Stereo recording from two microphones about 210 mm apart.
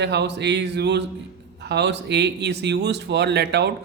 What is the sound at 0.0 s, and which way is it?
Speech, 55° right (ahead or behind).